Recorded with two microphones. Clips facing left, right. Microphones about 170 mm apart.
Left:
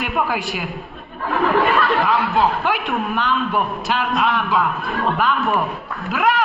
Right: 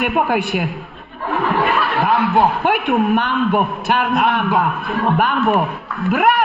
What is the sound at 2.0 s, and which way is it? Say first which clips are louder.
A man's voice: right 3 dB; 55° right (ahead or behind).